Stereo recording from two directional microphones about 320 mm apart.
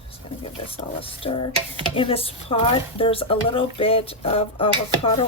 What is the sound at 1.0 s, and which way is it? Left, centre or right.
Speech, centre.